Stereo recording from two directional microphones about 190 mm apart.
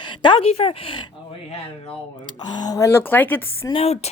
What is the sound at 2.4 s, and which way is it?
A woman's voice, 20° left (ahead or behind).